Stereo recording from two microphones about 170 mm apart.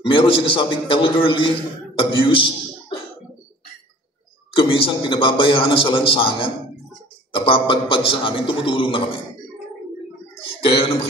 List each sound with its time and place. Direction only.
0.0 s a man's voice: 30° left (ahead or behind)
4.6 s a man's voice: 30° left (ahead or behind)
10.6 s a man's voice: 35° left (ahead or behind)